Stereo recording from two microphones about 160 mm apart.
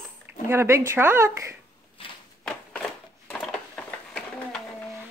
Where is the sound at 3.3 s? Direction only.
5° left (ahead or behind).